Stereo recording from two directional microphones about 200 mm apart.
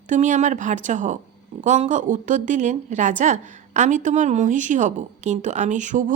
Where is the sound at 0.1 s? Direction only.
35° right (ahead or behind).